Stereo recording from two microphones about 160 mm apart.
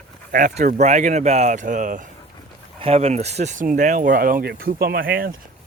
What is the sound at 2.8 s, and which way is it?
Speech, 40° right (ahead or behind).